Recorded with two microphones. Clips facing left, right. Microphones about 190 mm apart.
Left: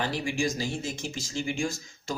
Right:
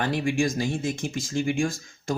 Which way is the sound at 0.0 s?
55° right (ahead or behind).